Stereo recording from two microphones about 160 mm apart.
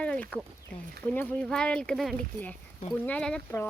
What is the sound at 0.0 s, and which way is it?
Speech, 5° left (ahead or behind).